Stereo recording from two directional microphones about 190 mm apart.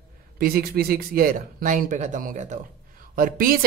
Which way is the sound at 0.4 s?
50° right (ahead or behind).